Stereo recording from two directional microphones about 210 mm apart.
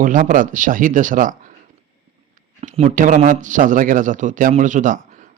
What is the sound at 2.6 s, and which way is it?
Speech, 35° right (ahead or behind).